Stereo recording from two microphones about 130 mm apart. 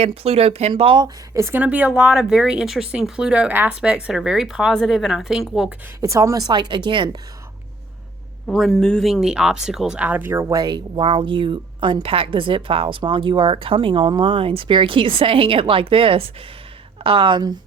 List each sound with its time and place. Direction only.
0.0 s speech: 50° right (ahead or behind)
1.0 s speech: 25° right (ahead or behind)
1.6 s speech: 10° right (ahead or behind)
6.0 s speech: 25° right (ahead or behind)
8.4 s speech: centre (ahead or behind); by 10.6 s 20° right (ahead or behind)
10.6 s speech: 35° right (ahead or behind)